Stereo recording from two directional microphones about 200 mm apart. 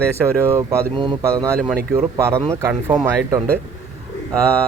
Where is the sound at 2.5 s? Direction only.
15° right (ahead or behind).